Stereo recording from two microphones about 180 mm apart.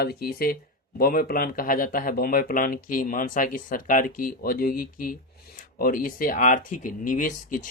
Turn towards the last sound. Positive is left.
turn(degrees=50)  # may be behind; listen again after turning